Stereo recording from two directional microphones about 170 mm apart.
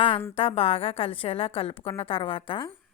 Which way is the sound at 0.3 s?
35° left (ahead or behind).